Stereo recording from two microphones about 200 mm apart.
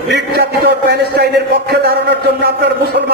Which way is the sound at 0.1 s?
55° right (ahead or behind).